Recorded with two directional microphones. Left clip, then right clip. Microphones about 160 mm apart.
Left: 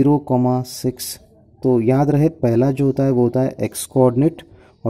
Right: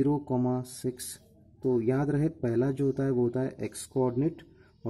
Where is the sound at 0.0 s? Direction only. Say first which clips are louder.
Left 12 dB; 20° left (ahead or behind).